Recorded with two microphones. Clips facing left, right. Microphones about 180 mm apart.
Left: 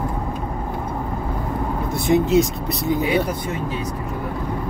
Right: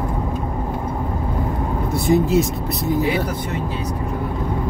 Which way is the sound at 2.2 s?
Centre (ahead or behind).